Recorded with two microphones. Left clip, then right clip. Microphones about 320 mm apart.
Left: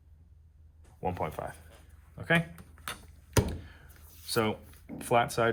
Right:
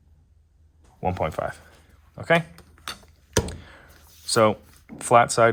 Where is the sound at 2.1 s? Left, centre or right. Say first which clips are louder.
Right 7 dB; centre.